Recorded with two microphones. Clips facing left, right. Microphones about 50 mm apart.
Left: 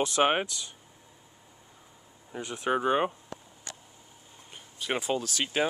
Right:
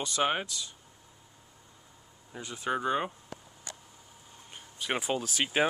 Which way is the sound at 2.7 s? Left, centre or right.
Left.